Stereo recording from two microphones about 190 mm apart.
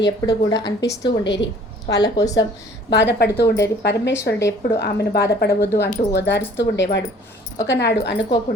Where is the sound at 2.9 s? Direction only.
65° left (ahead or behind).